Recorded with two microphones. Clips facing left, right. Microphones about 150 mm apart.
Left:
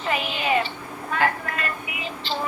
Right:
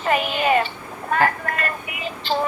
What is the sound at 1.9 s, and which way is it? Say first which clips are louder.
Music: right 1 dB; 50° right (ahead or behind).